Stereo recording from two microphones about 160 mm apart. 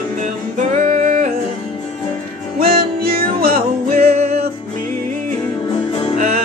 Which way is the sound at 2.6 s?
70° right (ahead or behind).